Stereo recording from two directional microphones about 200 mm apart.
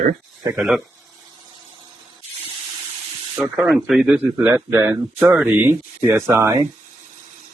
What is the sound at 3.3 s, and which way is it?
Speech, 5° right (ahead or behind).